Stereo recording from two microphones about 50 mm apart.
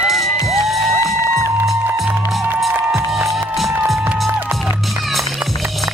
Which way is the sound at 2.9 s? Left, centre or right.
Centre.